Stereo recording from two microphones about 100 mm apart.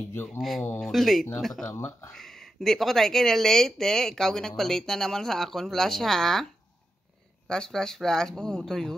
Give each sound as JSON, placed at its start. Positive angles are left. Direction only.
{"t": 0.1, "sound": "speech", "side_deg": 20}
{"t": 0.4, "sound": "speech", "side_deg": 0}
{"t": 1.8, "sound": "speech", "side_deg": 20}
{"t": 2.1, "sound": "speech", "side_deg": 5}
{"t": 7.4, "sound": "speech", "side_deg": 5}